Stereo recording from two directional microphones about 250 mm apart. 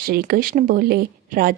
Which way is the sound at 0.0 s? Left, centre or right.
Right.